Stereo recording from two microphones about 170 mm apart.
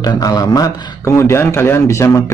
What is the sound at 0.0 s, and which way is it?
A man's voice, 20° left (ahead or behind).